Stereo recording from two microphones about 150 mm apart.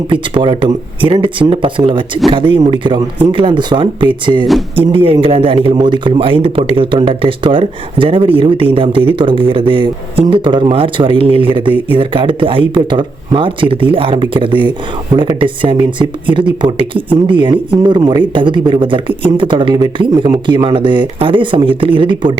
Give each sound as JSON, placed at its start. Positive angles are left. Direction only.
{"t": 0.1, "sound": "speech", "side_deg": -35}